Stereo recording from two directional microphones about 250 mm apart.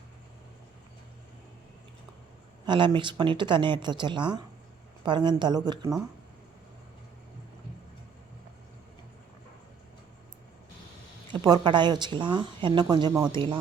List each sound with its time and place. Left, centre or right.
2.6 s speech: centre
11.3 s speech: centre